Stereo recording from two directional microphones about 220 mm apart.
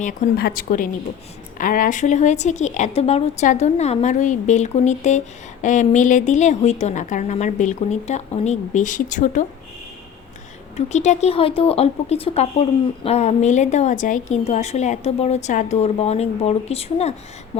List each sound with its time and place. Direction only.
0.0 s a woman's voice: 40° left (ahead or behind)
10.8 s speech: 30° left (ahead or behind)